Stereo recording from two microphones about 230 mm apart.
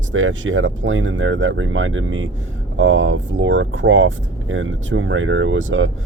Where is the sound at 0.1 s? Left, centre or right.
Right.